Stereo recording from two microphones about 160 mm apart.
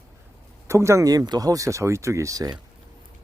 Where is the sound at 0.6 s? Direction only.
15° right (ahead or behind).